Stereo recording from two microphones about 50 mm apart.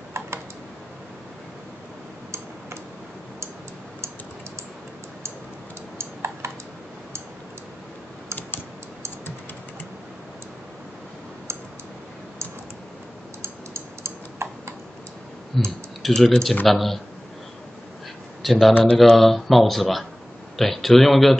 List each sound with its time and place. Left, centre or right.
0.2 s typing: right
5.9 s typing: right
13.4 s typing: right
15.5 s clicking: centre
16.1 s speech: centre
18.4 s speech: centre